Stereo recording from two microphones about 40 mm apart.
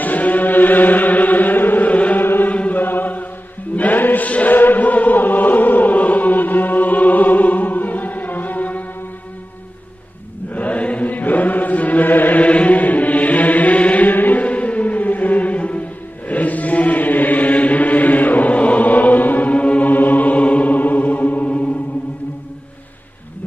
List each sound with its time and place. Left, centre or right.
0.0 s music: left
1.9 s music: left
2.1 s music: left
2.5 s chant: left
2.8 s chant: left
4.3 s chant: left
4.6 s chant: left
10.5 s chant: left
12.4 s music: left
16.3 s chant: left
19.5 s music: left
19.9 s music: left